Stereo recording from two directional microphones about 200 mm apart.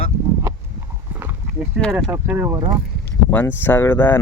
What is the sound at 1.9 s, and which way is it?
Speech, 5° right (ahead or behind).